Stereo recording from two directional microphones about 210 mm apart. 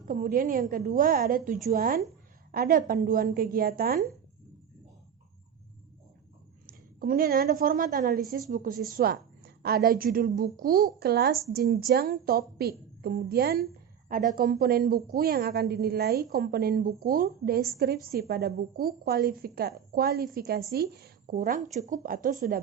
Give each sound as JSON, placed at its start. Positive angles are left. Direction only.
{"t": 0.0, "sound": "a woman's voice", "side_deg": -40}
{"t": 6.7, "sound": "a woman's voice", "side_deg": -45}